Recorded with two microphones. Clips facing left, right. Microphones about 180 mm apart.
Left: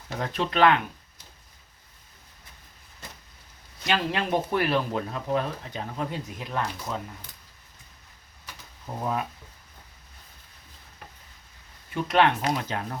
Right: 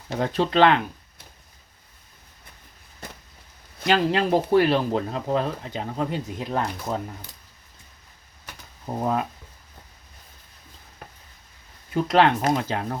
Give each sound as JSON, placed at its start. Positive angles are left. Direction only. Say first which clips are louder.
{"t": 0.2, "sound": "speech", "louder": "right 4 dB", "side_deg": -30}
{"t": 3.8, "sound": "speech", "louder": "right 6 dB", "side_deg": -35}
{"t": 9.0, "sound": "speech", "louder": "right 4 dB", "side_deg": -30}
{"t": 11.9, "sound": "speech", "louder": "right 3 dB", "side_deg": -35}